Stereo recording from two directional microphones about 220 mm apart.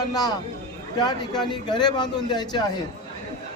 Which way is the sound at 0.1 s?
20° left (ahead or behind).